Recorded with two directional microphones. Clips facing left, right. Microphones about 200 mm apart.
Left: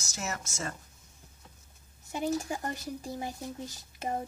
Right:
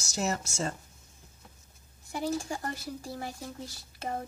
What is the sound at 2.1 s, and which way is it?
Speech, 20° left (ahead or behind).